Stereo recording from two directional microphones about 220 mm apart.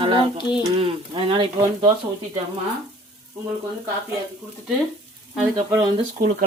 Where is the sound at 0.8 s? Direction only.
25° right (ahead or behind).